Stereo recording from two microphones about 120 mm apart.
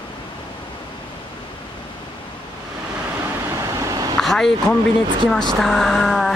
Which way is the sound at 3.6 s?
25° right (ahead or behind).